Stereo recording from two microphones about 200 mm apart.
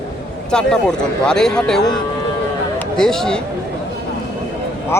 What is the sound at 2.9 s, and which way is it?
Speech, centre (ahead or behind).